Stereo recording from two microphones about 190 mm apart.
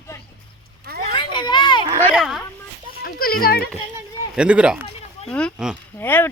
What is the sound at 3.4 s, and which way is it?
Speech, 55° left (ahead or behind).